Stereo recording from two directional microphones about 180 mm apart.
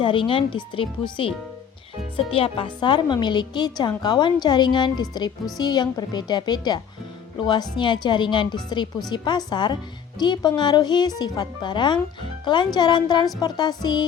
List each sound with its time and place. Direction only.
0.0 s a woman's voice: 30° left (ahead or behind)